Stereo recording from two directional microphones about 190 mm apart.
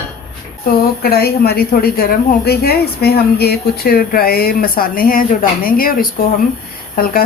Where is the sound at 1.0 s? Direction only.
55° left (ahead or behind).